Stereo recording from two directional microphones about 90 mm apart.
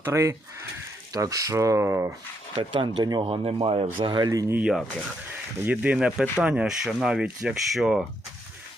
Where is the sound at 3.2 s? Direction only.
90° right.